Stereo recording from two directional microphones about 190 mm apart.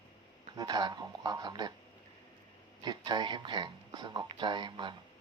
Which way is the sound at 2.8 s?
25° right (ahead or behind).